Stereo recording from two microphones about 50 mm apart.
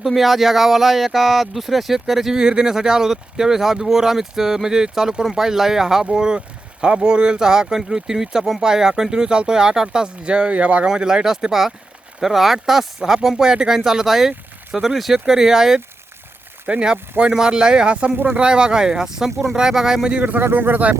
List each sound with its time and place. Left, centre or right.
0.0 s speech: centre
2.3 s speech: centre
16.8 s speech: centre
20.1 s speech: right
20.3 s speech: right